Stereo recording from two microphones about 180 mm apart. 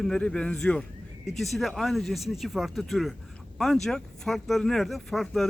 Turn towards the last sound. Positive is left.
turn(degrees=0)  # may be behind; listen again after turning